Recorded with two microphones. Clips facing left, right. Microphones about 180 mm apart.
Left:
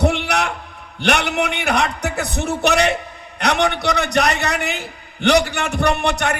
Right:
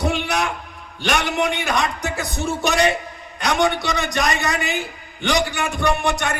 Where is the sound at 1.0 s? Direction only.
65° left (ahead or behind).